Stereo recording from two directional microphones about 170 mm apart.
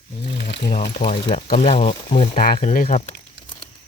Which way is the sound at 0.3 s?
70° left (ahead or behind).